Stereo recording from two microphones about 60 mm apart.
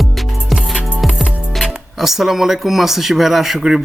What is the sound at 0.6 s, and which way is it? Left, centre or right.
Music, centre.